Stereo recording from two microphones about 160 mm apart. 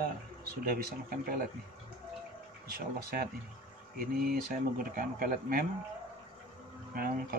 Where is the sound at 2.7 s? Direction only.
70° right (ahead or behind).